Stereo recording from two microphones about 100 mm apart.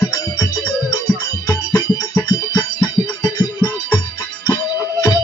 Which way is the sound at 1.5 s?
35° left (ahead or behind).